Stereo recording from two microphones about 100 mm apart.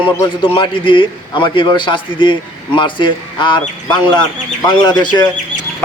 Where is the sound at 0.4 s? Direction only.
60° left (ahead or behind).